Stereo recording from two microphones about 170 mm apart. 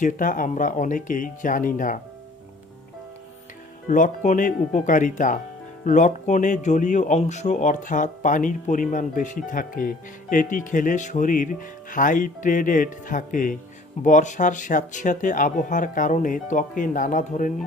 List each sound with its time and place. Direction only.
0.0 s speech: 50° left (ahead or behind)
3.8 s speech: 50° left (ahead or behind)